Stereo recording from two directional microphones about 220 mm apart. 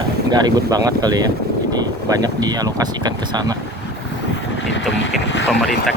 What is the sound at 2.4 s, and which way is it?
Speech, 15° right (ahead or behind).